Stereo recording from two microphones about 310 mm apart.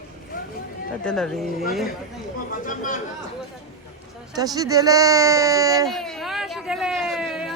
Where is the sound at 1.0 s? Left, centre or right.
Centre.